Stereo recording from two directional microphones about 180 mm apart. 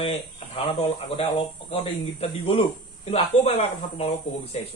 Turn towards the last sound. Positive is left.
turn(degrees=35)  # may be behind; listen again after turning